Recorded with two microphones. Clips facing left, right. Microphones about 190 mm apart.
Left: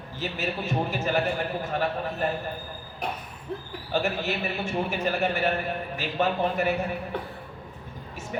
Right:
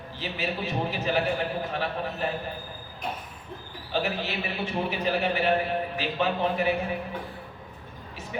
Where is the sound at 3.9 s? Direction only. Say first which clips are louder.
Left 2 dB; 45° left (ahead or behind).